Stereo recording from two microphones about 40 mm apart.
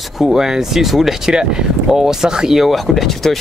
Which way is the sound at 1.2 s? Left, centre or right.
Centre.